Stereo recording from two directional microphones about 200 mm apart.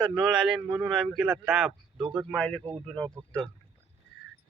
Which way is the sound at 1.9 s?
20° right (ahead or behind).